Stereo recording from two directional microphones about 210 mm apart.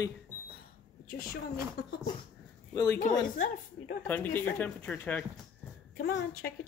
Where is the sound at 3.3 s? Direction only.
35° left (ahead or behind).